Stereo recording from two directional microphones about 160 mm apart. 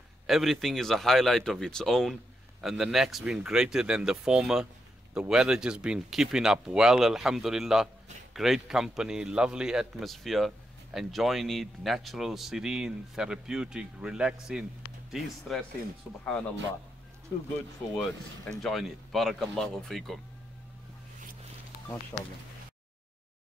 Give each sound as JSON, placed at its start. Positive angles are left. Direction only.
{"t": 0.3, "sound": "speech", "side_deg": 0}
{"t": 17.9, "sound": "speech", "side_deg": 5}
{"t": 22.1, "sound": "speech", "side_deg": 20}